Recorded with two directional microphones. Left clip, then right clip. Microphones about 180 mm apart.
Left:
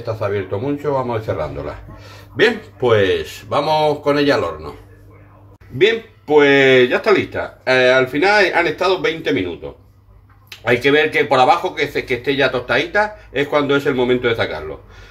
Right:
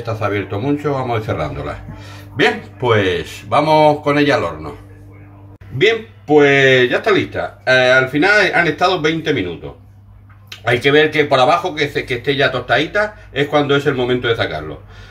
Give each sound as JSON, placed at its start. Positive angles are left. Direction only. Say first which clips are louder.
{"t": 0.2, "sound": "a man's voice", "louder": "right 1 dB", "side_deg": 30}
{"t": 5.8, "sound": "speech", "louder": "right 1 dB", "side_deg": 40}
{"t": 10.6, "sound": "speech", "louder": "right 2 dB", "side_deg": 45}